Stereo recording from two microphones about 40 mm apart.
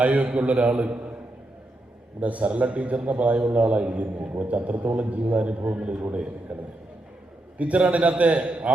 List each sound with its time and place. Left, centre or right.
0.0 s a man's voice: right
2.2 s a man's voice: right
7.6 s a man's voice: right